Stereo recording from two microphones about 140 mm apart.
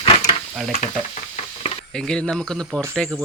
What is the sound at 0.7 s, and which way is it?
Stir, 60° left (ahead or behind).